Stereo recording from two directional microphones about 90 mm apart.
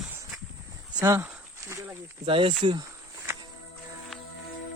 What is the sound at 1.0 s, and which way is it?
Speech, 35° right (ahead or behind).